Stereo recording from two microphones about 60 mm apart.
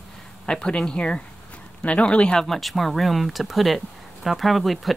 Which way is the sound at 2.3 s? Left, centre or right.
Centre.